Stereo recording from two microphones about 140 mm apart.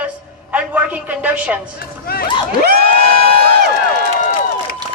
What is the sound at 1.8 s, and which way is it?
Speech, 90° left.